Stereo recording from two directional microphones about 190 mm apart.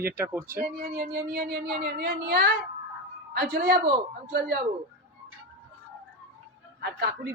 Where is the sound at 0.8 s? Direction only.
55° right (ahead or behind).